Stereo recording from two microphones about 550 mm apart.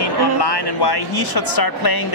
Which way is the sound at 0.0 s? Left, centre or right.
Left.